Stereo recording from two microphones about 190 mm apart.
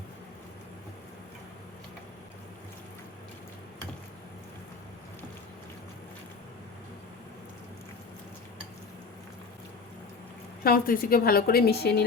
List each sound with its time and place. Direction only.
10.6 s a woman's voice: 50° left (ahead or behind)